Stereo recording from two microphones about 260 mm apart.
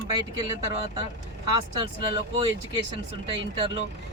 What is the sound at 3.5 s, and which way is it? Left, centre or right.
Speech, right.